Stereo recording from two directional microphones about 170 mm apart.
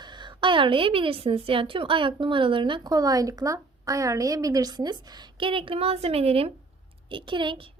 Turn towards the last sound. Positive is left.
turn(degrees=-30)  # may be behind; listen again after turning